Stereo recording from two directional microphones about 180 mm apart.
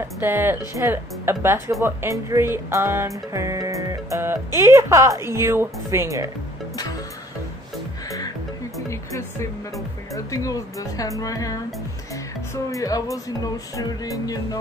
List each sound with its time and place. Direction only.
0.2 s a woman's voice: 10° right (ahead or behind)
10.1 s a woman's voice: 20° left (ahead or behind)
12.7 s a woman's voice: 20° left (ahead or behind)